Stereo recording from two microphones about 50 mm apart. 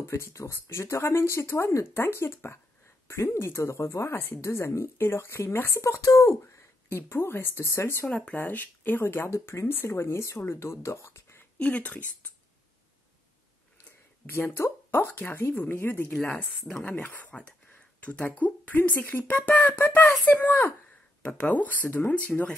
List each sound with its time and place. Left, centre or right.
0.0 s speech: left
2.1 s speech: left
4.3 s speech: left
6.4 s speech: left
7.5 s speech: left
8.4 s speech: left
9.0 s a woman's voice: left
9.3 s speech: left
9.7 s speech: left
11.5 s speech: left
14.2 s a woman's voice: left
16.1 s speech: left
18.2 s speech: left
19.8 s speech: left